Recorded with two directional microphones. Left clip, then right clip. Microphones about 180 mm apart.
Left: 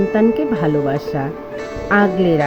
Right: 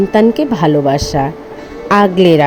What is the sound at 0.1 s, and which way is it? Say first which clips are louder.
Music: right 5 dB; 25° right (ahead or behind).